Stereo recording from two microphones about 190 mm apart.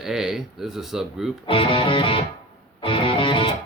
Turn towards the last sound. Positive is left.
turn(degrees=25)  # may be behind; listen again after turning